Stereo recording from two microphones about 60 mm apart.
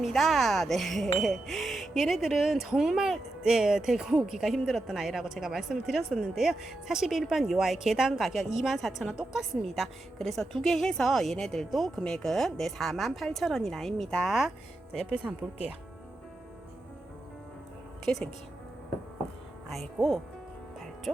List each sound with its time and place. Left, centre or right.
0.0 s a woman's voice: centre
15.1 s speech: right
18.1 s speech: centre
19.6 s speech: centre